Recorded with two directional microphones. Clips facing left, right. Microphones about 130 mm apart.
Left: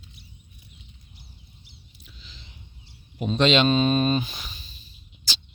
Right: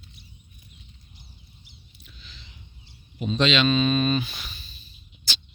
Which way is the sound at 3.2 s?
50° left (ahead or behind).